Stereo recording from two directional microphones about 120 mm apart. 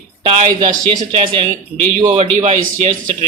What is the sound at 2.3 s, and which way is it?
Speech, 60° right (ahead or behind).